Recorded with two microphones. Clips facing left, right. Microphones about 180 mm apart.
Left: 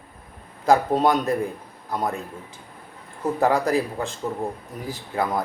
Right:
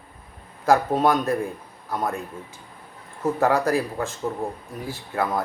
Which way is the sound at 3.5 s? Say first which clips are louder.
Even; 15° left (ahead or behind).